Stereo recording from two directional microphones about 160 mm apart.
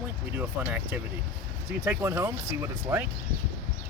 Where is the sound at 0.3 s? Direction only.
10° right (ahead or behind).